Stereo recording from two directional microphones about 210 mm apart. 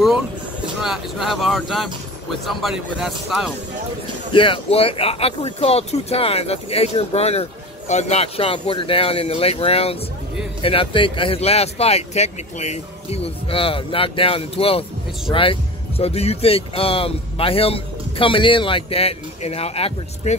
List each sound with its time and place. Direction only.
0.7 s speech: centre (ahead or behind)
4.3 s speech: 25° left (ahead or behind)